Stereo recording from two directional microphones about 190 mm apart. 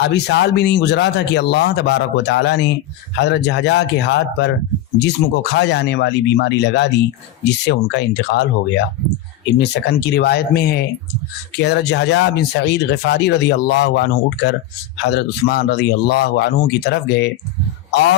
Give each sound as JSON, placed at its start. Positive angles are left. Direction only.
{"t": 0.0, "sound": "speech", "side_deg": 60}
{"t": 9.6, "sound": "speech", "side_deg": 60}